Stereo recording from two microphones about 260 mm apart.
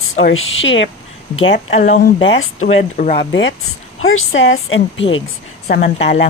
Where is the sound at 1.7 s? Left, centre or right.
Left.